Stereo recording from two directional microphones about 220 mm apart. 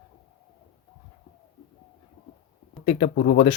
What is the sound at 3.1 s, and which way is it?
Speech, 50° left (ahead or behind).